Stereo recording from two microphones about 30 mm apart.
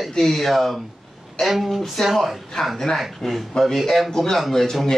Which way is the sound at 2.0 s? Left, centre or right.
Left.